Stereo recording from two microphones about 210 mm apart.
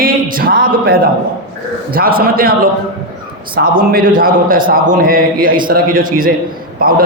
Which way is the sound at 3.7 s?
40° right (ahead or behind).